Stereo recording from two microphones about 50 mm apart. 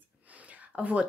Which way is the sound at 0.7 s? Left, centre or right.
Right.